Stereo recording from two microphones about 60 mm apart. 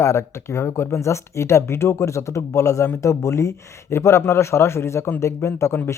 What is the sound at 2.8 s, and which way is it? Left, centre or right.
Speech, left.